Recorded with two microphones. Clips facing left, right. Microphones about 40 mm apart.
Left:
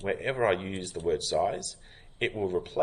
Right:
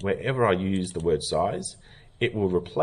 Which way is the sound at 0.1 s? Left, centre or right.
Right.